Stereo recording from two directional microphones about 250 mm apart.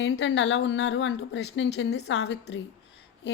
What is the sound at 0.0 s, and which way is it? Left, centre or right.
Speech, left.